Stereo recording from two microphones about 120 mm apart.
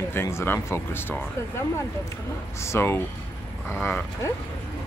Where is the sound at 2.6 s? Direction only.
20° left (ahead or behind).